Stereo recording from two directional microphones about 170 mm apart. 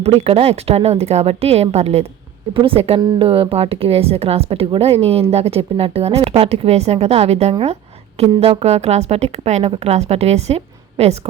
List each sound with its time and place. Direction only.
0.0 s a woman's voice: 35° right (ahead or behind)